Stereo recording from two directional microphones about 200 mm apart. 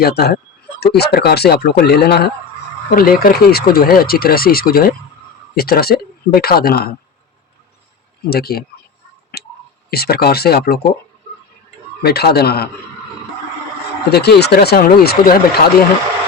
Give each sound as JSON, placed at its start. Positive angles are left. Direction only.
{"t": 0.0, "sound": "speech", "side_deg": 55}
{"t": 8.3, "sound": "speech", "side_deg": 50}
{"t": 9.3, "sound": "tick", "side_deg": 50}
{"t": 9.9, "sound": "speech", "side_deg": 50}
{"t": 12.0, "sound": "speech", "side_deg": 50}
{"t": 14.1, "sound": "speech", "side_deg": 55}